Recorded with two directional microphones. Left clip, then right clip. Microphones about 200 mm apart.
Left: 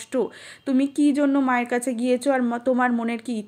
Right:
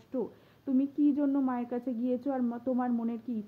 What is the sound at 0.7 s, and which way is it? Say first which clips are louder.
Speech: left 8 dB; 5° left (ahead or behind).